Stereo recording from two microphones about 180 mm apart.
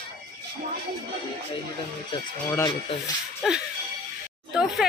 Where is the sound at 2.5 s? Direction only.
15° left (ahead or behind).